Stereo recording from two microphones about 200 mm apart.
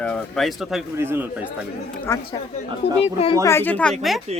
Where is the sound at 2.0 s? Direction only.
15° left (ahead or behind).